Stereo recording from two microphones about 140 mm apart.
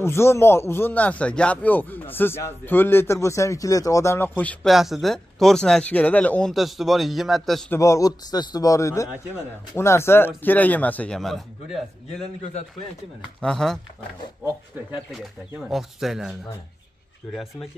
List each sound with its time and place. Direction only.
0.0 s speech: 20° left (ahead or behind)
4.7 s speech: centre (ahead or behind)
6.5 s speech: centre (ahead or behind)
7.7 s a man's voice: 20° left (ahead or behind); by 11.8 s centre (ahead or behind)
13.4 s speech: 5° left (ahead or behind)
15.7 s speech: centre (ahead or behind)